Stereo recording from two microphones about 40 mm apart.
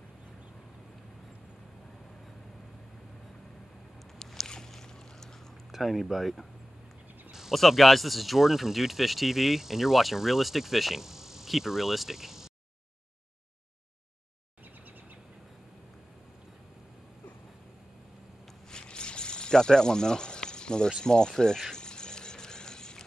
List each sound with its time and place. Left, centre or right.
4.5 s boat: centre
5.7 s speech: centre
7.2 s a sound: centre
7.5 s speech: centre
18.7 s snake: left
21.0 s speech: left
21.7 s dog: centre